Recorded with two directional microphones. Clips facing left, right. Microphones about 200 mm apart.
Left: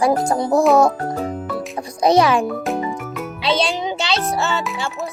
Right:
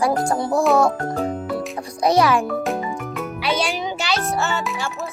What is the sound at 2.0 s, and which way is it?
Speech, 20° left (ahead or behind).